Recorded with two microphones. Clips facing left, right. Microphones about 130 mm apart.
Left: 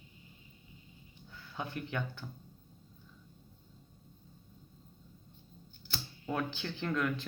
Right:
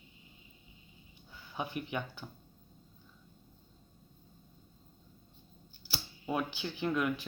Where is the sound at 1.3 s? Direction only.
15° right (ahead or behind).